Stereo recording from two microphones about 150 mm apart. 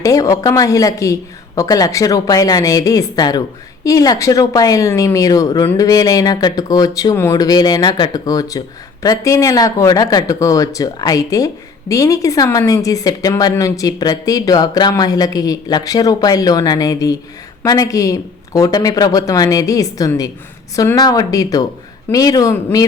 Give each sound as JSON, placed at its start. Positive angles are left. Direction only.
{"t": 0.0, "sound": "a woman's voice", "side_deg": 25}